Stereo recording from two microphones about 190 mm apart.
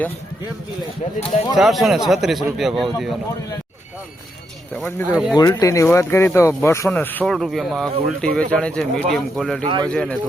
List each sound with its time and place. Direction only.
1.5 s a man's voice: centre (ahead or behind)
4.7 s speech: 10° left (ahead or behind)
5.1 s a man's voice: 5° right (ahead or behind)
5.4 s a man's voice: 20° left (ahead or behind); by 9.6 s centre (ahead or behind)
9.6 s speech: 25° right (ahead or behind)
9.9 s a man's voice: 5° left (ahead or behind)